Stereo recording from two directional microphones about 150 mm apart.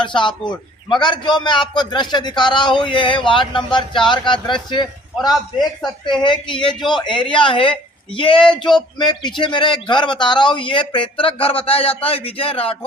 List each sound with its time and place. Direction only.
0.0 s speech: 30° left (ahead or behind)
6.2 s speech: 30° left (ahead or behind)